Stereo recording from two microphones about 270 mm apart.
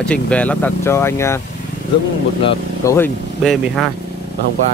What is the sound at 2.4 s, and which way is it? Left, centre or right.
Speech, centre.